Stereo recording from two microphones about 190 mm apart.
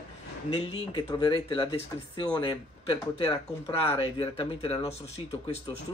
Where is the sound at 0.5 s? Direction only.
30° left (ahead or behind).